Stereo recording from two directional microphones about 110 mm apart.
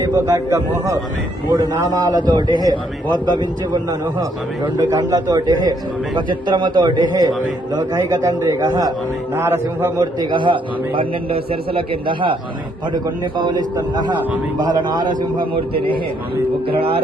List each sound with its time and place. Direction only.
0.0 s a man's voice: 30° right (ahead or behind)
4.9 s a man's voice: 35° right (ahead or behind)
9.3 s a man's voice: 20° right (ahead or behind)
10.0 s a man's voice: 40° right (ahead or behind)